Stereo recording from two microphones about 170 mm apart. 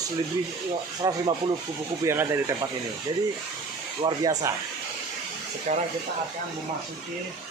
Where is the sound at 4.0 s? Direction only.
25° right (ahead or behind).